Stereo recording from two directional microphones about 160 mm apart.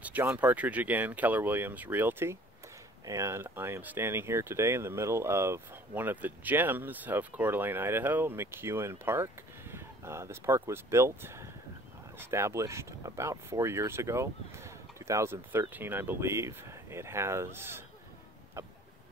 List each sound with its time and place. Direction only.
0.0 s speech: 10° right (ahead or behind)